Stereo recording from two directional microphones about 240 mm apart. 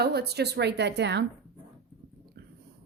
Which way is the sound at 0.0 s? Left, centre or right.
Right.